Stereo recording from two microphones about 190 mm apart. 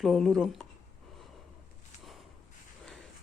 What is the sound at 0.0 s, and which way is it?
Speech, centre (ahead or behind).